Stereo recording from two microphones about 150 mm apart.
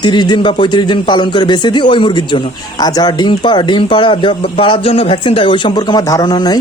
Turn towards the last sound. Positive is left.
turn(degrees=25)  # may be behind; listen again after turning